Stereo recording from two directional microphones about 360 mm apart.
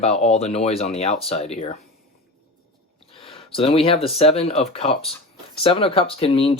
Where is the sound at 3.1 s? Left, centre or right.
Centre.